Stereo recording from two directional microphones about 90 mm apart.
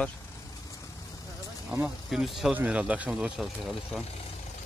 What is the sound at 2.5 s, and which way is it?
Speech, 15° right (ahead or behind).